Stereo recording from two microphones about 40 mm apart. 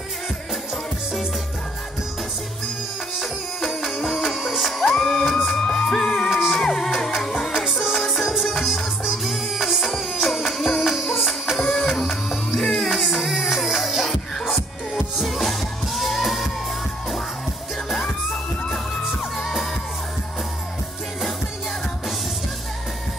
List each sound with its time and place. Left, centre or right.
3.2 s music: centre
7.5 s music: centre
8.0 s music: centre
19.3 s music: centre